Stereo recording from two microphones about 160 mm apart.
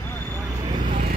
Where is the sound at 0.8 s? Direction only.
55° right (ahead or behind).